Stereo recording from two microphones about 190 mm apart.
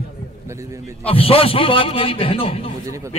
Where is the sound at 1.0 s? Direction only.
30° left (ahead or behind).